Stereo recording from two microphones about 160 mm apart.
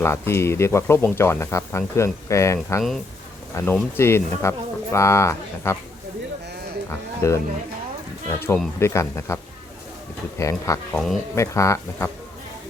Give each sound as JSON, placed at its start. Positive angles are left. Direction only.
{"t": 0.0, "sound": "speech", "side_deg": 15}
{"t": 7.2, "sound": "speech", "side_deg": 15}
{"t": 10.9, "sound": "speech", "side_deg": 0}
{"t": 11.3, "sound": "speech", "side_deg": 20}